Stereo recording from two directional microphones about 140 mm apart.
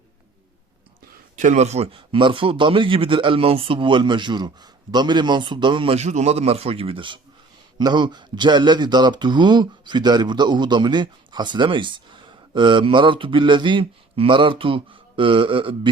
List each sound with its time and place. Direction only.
1.4 s speech: 55° right (ahead or behind); by 15.9 s 35° right (ahead or behind)